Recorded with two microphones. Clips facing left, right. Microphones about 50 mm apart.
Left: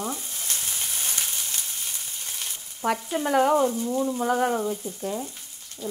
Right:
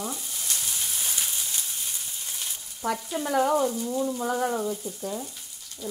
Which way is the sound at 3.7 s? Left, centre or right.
Centre.